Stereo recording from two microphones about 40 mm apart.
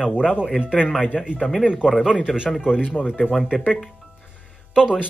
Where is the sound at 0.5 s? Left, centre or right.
Centre.